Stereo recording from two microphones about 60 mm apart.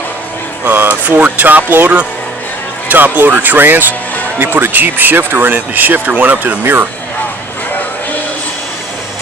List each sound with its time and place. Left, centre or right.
0.6 s speech: right